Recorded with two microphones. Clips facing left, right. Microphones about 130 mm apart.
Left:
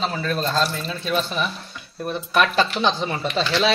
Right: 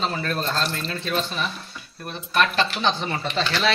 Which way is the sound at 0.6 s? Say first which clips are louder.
Left 3 dB; 10° left (ahead or behind).